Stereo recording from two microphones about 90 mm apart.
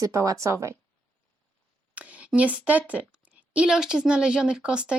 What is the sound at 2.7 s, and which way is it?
A woman's voice, 15° right (ahead or behind).